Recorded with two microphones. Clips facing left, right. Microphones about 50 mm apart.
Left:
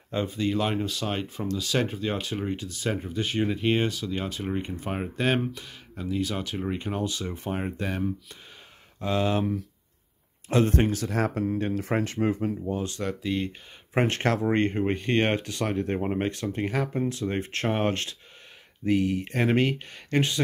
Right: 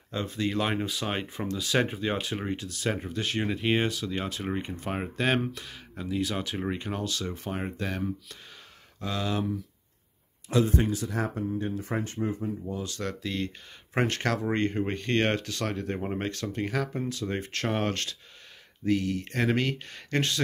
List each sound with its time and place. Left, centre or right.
0.3 s speech: centre
7.0 s speech: centre
9.0 s speech: left
10.5 s speech: left
13.0 s speech: centre
14.0 s speech: left